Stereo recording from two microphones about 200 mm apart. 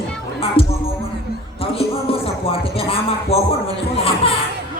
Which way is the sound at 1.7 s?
30° left (ahead or behind).